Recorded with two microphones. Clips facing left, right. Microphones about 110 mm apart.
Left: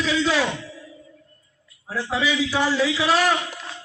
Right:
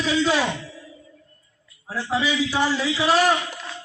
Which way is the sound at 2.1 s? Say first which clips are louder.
Even; 40° right (ahead or behind).